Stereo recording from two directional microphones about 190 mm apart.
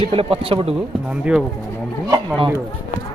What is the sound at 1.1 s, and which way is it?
Speech, 5° right (ahead or behind).